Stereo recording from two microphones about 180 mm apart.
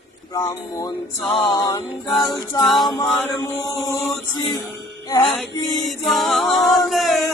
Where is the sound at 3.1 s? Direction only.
10° left (ahead or behind).